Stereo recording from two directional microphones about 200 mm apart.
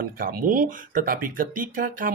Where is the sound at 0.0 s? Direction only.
45° right (ahead or behind).